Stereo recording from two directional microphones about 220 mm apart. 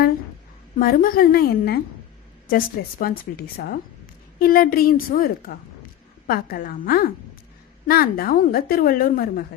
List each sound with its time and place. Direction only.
0.8 s a woman's voice: 40° left (ahead or behind)